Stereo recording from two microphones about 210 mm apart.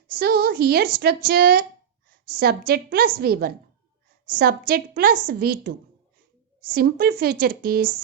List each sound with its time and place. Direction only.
0.2 s a woman's voice: 45° right (ahead or behind)
6.7 s a woman's voice: 45° right (ahead or behind)